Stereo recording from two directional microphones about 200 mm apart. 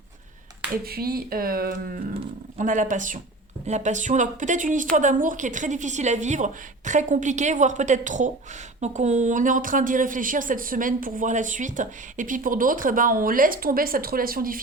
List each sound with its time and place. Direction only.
0.9 s a woman's voice: 50° right (ahead or behind)